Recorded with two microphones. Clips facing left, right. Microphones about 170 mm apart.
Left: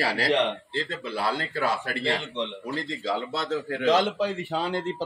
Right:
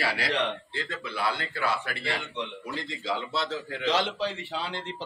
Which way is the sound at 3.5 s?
45° left (ahead or behind).